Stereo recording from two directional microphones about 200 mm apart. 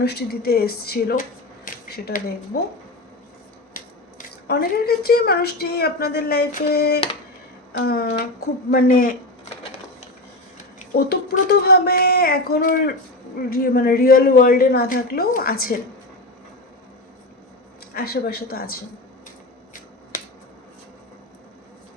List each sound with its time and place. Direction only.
0.0 s a woman's voice: 55° left (ahead or behind)
1.6 s a sound: 45° left (ahead or behind)
3.8 s a woman's voice: 50° left (ahead or behind)
10.9 s a woman's voice: 50° left (ahead or behind)
17.9 s a woman's voice: 50° left (ahead or behind)